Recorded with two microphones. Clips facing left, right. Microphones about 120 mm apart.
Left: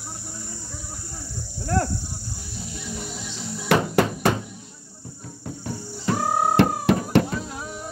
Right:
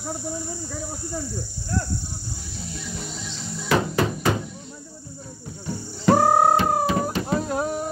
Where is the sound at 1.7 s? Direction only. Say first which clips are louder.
Left 5 dB; 70° left (ahead or behind).